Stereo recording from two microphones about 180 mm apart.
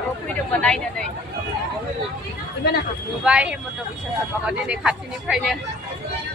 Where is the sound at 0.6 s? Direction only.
5° left (ahead or behind).